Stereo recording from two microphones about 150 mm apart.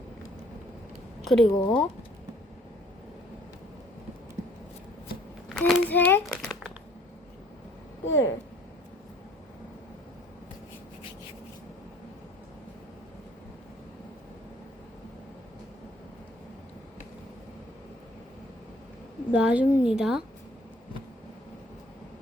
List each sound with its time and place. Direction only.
1.2 s speech: centre (ahead or behind)
1.5 s speech: 30° left (ahead or behind)
5.5 s a sound: centre (ahead or behind)
5.9 s a child's voice: 10° left (ahead or behind)
6.2 s crumpling: 5° left (ahead or behind)
8.0 s speech: 15° left (ahead or behind)
19.3 s a woman's voice: 5° right (ahead or behind)